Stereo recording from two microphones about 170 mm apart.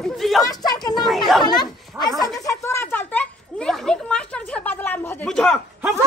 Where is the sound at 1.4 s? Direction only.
25° left (ahead or behind).